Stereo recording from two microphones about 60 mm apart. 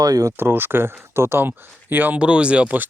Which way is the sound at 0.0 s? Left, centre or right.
Right.